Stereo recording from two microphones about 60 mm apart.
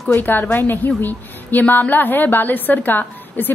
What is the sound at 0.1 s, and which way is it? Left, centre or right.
A woman's voice, left.